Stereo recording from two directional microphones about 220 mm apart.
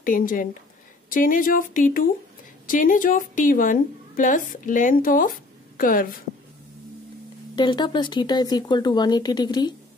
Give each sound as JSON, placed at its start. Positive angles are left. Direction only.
{"t": 0.0, "sound": "a woman's voice", "side_deg": 40}
{"t": 7.5, "sound": "speech", "side_deg": 20}